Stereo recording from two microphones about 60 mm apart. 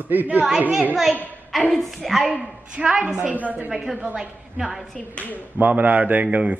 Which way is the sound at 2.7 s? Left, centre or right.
Centre.